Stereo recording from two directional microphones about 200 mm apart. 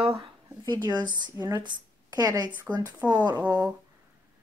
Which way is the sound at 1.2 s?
20° right (ahead or behind).